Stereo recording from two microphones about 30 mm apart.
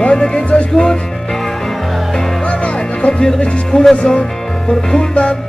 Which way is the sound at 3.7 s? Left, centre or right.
Left.